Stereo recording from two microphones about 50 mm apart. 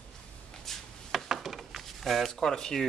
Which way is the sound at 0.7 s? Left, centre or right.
Centre.